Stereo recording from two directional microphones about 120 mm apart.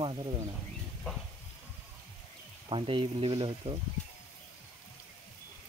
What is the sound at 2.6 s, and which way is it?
Speech, 45° right (ahead or behind).